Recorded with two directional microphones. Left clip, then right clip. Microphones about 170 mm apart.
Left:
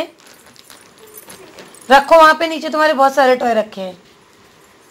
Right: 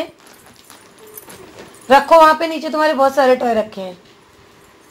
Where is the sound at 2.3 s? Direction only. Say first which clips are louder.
Left 1 dB; 15° left (ahead or behind).